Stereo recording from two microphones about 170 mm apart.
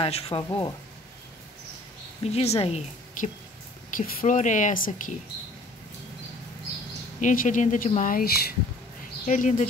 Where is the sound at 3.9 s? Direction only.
50° left (ahead or behind).